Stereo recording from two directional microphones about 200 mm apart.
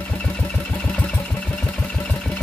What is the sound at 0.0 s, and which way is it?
Engine, 5° left (ahead or behind).